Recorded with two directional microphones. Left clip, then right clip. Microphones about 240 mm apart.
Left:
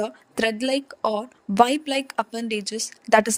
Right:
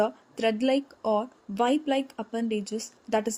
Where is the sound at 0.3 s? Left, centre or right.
Left.